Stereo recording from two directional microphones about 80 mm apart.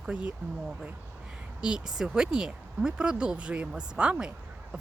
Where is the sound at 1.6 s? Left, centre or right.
Centre.